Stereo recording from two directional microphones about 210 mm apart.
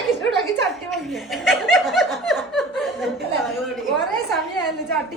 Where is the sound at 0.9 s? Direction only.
Centre (ahead or behind).